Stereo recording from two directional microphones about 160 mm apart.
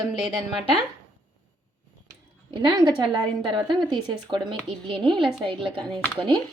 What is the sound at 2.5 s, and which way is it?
A woman's voice, 30° right (ahead or behind).